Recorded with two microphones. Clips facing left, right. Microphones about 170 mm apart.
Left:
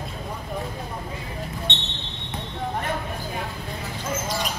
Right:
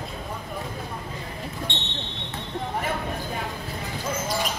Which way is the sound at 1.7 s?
20° left (ahead or behind).